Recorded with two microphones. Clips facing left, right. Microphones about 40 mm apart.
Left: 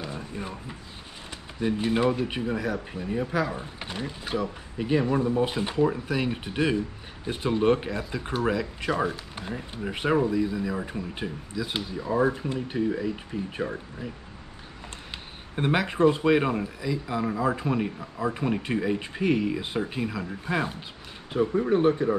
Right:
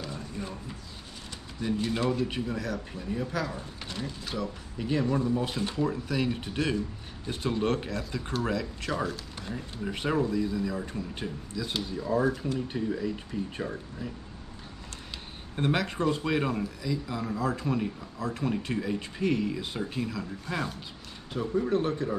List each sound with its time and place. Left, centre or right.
0.0 s a sound: left
1.6 s speech: left
15.5 s speech: centre